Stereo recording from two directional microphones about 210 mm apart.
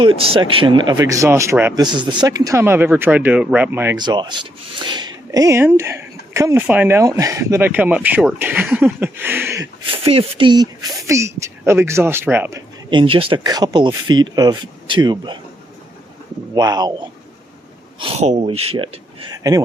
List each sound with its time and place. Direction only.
0.0 s speech: 25° right (ahead or behind)
10.0 s speech: 25° right (ahead or behind)
16.6 s speech: 20° right (ahead or behind)
18.0 s speech: 30° right (ahead or behind)